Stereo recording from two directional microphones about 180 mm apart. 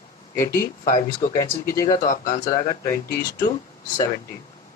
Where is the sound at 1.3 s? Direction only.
15° left (ahead or behind).